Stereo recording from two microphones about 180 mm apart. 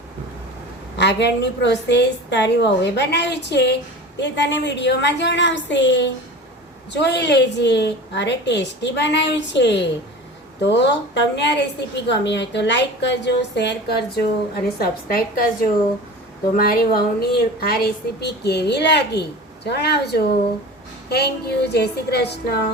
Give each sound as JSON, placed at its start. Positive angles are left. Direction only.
{"t": 0.9, "sound": "a woman's voice", "side_deg": 75}
{"t": 6.9, "sound": "a woman's voice", "side_deg": 70}
{"t": 14.5, "sound": "a woman's voice", "side_deg": 55}
{"t": 16.6, "sound": "a woman's voice", "side_deg": 55}